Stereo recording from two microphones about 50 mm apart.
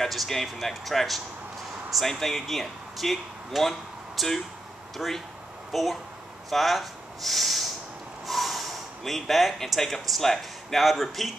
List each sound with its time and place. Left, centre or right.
0.0 s speech: centre